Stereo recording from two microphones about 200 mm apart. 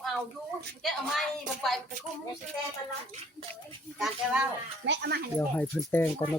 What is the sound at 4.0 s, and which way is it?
Speech, 5° right (ahead or behind).